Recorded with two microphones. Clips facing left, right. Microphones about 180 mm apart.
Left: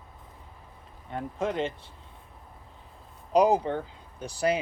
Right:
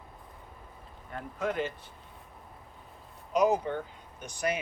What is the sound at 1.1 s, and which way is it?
Speech, 25° left (ahead or behind).